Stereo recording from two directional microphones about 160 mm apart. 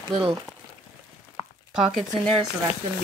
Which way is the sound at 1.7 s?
Centre (ahead or behind).